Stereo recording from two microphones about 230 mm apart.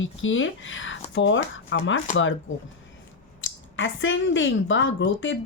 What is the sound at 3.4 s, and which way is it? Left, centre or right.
Speech, left.